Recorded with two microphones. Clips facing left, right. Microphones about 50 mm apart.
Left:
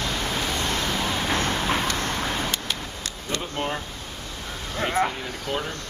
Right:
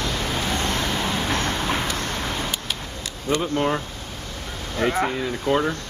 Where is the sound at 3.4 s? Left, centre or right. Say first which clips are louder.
Right 6 dB; right.